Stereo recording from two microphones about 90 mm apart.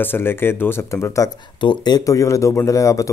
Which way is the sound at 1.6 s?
50° left (ahead or behind).